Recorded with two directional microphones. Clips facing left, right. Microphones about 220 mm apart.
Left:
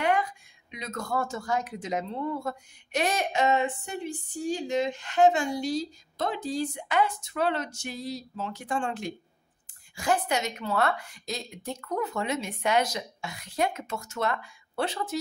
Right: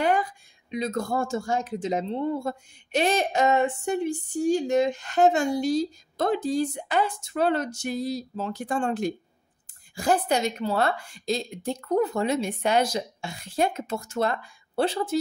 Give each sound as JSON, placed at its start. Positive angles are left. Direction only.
{"t": 0.0, "sound": "speech", "side_deg": -35}
{"t": 3.3, "sound": "a woman's voice", "side_deg": -45}